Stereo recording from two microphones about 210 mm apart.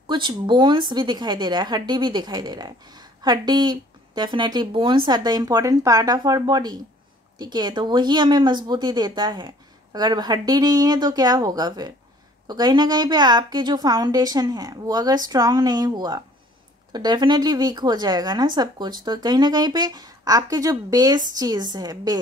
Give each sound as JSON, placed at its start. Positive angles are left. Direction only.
{"t": 0.0, "sound": "speech", "side_deg": -20}